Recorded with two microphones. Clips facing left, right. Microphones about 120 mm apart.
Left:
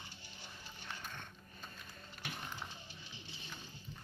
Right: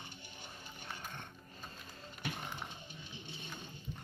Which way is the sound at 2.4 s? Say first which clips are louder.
Right 2 dB; 20° right (ahead or behind).